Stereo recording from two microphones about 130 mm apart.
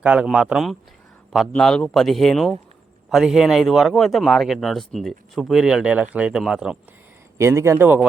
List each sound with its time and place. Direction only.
0.0 s speech: 10° right (ahead or behind)
7.3 s a man's voice: 20° right (ahead or behind)